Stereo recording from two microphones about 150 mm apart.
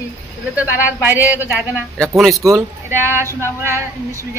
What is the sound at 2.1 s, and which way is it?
Speech, centre (ahead or behind).